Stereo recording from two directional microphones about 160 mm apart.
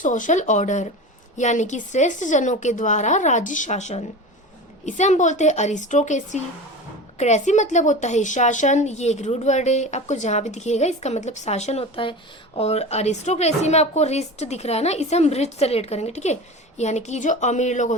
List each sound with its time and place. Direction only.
0.0 s a woman's voice: 50° left (ahead or behind)